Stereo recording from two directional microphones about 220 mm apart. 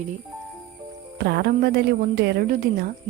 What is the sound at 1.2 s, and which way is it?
A woman's voice, 50° right (ahead or behind).